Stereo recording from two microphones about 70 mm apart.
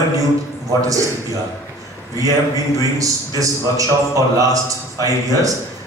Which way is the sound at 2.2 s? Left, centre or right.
Right.